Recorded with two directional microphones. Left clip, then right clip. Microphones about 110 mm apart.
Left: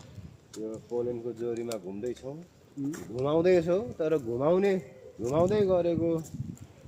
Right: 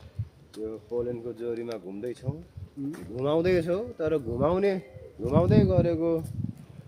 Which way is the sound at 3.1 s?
15° right (ahead or behind).